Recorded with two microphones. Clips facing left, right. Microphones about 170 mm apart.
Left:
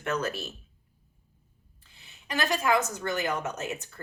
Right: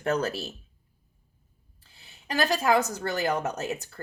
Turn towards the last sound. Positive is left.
turn(degrees=-35)  # may be behind; listen again after turning